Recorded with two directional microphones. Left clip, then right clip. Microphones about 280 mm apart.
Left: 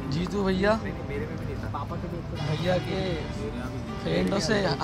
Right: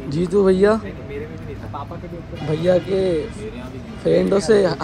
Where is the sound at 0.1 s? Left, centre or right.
Centre.